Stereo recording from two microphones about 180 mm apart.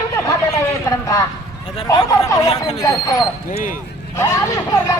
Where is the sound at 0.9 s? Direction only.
20° left (ahead or behind).